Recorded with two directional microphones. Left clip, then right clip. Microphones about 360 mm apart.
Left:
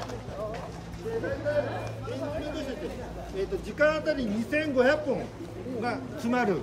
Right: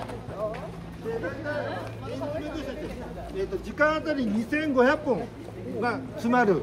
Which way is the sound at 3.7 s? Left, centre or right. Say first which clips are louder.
Right 1 dB; centre.